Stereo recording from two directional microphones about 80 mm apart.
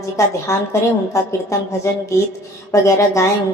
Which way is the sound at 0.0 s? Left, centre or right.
Left.